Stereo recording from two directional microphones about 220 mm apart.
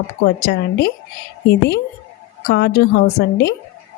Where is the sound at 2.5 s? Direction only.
50° left (ahead or behind).